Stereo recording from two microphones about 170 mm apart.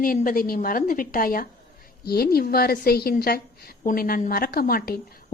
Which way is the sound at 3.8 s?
55° left (ahead or behind).